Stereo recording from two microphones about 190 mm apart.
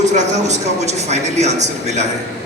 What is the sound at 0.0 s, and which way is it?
A woman's voice, 35° right (ahead or behind).